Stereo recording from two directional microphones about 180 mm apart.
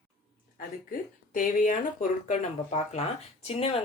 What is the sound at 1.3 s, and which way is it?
Speech, 50° left (ahead or behind).